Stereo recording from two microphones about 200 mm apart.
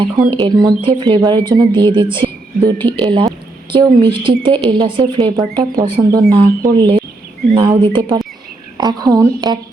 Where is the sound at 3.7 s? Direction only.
25° right (ahead or behind).